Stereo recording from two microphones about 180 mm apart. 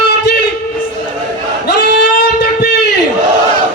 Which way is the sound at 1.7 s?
70° left (ahead or behind).